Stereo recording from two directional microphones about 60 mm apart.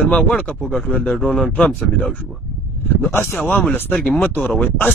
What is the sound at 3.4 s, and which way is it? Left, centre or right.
Speech, left.